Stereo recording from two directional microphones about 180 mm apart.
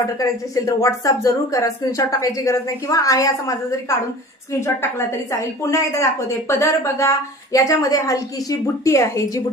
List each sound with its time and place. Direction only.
0.2 s a woman's voice: 20° left (ahead or behind)